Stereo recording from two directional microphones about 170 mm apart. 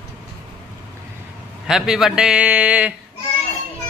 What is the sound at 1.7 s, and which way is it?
A man's voice, 5° right (ahead or behind).